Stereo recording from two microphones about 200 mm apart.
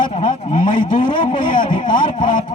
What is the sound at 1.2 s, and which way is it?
Speech, 25° left (ahead or behind).